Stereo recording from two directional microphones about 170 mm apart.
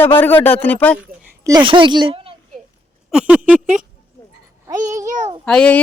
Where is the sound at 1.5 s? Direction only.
25° right (ahead or behind).